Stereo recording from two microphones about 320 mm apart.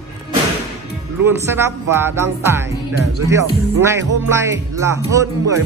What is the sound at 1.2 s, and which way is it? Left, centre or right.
Speech, centre.